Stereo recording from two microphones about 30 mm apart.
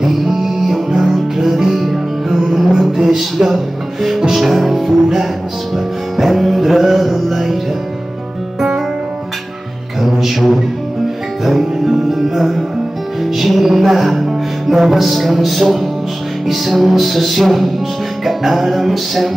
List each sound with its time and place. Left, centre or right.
0.0 s music: centre
3.5 s speech: centre
4.3 s music: centre
11.4 s music: centre